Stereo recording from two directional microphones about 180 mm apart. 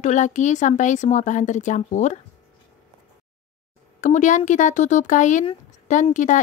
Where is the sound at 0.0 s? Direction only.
40° left (ahead or behind).